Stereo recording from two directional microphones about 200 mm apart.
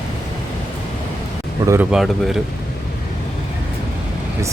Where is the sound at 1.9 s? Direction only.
Centre (ahead or behind).